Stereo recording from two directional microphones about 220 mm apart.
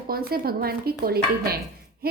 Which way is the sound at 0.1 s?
45° right (ahead or behind).